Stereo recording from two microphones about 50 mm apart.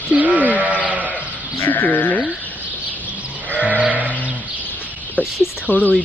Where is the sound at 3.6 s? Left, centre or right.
Right.